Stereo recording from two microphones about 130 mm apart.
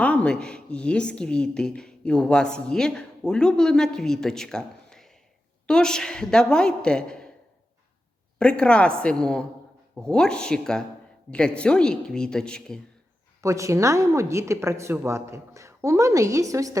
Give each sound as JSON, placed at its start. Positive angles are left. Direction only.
{"t": 0.0, "sound": "a woman's voice", "side_deg": 10}
{"t": 8.4, "sound": "a woman's voice", "side_deg": 10}
{"t": 13.4, "sound": "a woman's voice", "side_deg": -25}